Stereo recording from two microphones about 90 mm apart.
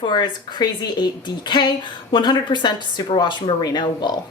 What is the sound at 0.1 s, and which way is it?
A woman's voice, 50° left (ahead or behind).